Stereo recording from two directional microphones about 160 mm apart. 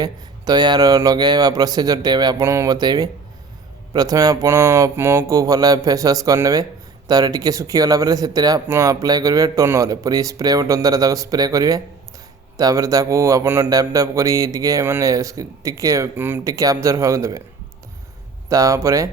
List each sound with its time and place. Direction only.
0.0 s a man's voice: 25° right (ahead or behind)
18.4 s a man's voice: 20° right (ahead or behind)